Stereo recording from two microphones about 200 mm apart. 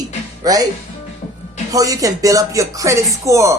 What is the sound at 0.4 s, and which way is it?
Speech, 20° right (ahead or behind).